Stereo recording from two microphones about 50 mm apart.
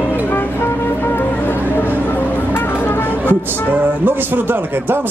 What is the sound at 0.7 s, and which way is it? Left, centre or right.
Music, left.